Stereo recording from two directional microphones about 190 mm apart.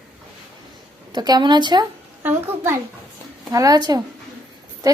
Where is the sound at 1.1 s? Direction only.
20° right (ahead or behind).